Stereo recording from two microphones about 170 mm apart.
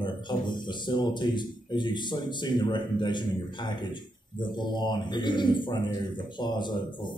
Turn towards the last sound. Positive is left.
turn(degrees=25)  # may be behind; listen again after turning